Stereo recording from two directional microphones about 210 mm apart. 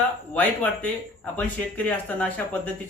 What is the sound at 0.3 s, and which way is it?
A man's voice, 5° left (ahead or behind).